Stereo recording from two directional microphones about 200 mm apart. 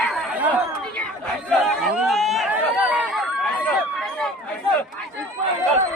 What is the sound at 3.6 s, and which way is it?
Run, 5° left (ahead or behind).